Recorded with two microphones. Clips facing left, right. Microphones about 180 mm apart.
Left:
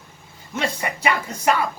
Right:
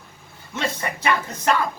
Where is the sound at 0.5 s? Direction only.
10° left (ahead or behind).